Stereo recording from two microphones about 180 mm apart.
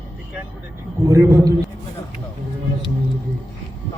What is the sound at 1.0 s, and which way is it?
Speech, 15° right (ahead or behind).